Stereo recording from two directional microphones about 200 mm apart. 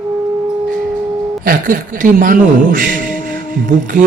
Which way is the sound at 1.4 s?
45° right (ahead or behind).